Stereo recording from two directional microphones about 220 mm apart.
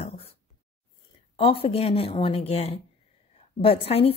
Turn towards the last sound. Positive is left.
turn(degrees=25)  # may be behind; listen again after turning